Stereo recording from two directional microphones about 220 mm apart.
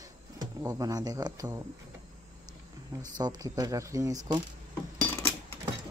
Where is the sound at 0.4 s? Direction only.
15° right (ahead or behind).